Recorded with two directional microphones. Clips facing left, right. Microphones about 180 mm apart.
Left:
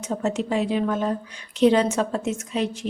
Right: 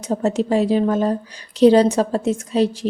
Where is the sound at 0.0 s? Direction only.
35° right (ahead or behind).